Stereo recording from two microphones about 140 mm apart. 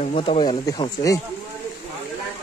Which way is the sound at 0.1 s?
40° left (ahead or behind).